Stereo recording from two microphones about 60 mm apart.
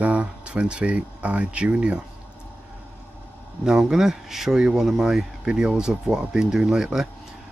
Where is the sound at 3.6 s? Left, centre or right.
Centre.